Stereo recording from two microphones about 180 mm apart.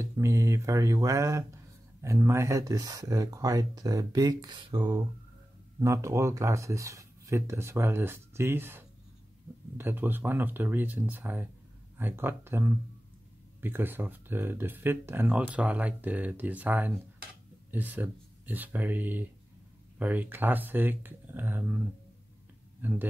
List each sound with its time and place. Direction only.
0.0 s speech: 15° right (ahead or behind)